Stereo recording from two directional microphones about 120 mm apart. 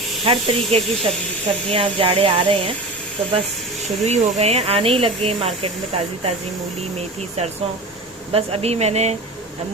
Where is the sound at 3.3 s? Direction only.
70° right (ahead or behind).